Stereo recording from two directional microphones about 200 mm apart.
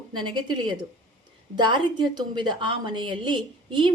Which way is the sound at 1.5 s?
25° right (ahead or behind).